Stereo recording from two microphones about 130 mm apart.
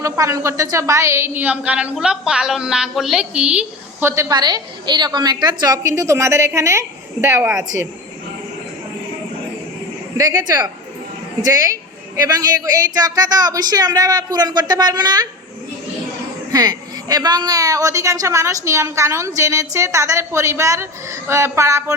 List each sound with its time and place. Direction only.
0.0 s a woman's voice: 25° right (ahead or behind); by 4.1 s 10° right (ahead or behind)
4.1 s a woman's voice: 25° right (ahead or behind)
10.2 s a woman's voice: 30° right (ahead or behind)
16.5 s a woman's voice: 30° right (ahead or behind)